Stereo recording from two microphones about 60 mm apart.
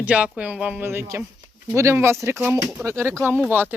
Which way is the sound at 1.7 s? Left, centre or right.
Right.